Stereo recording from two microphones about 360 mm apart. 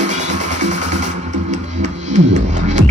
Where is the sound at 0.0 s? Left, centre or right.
Centre.